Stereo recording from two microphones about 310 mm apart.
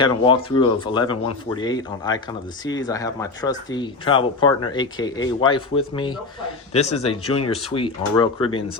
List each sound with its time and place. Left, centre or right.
0.0 s a man's voice: centre